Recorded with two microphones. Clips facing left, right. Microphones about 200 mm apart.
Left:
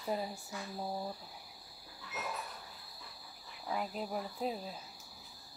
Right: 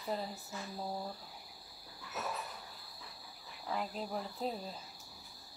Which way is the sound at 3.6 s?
5° left (ahead or behind).